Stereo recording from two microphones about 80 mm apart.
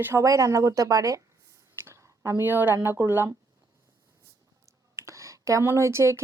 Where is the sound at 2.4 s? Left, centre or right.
Right.